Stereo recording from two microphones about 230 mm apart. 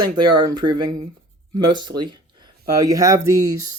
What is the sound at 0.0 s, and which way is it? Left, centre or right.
Speech, centre.